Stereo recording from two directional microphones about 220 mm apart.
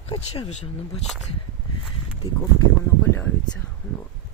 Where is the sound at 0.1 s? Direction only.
25° left (ahead or behind).